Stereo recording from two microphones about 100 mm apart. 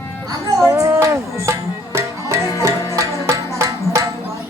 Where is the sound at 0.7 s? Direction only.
25° right (ahead or behind).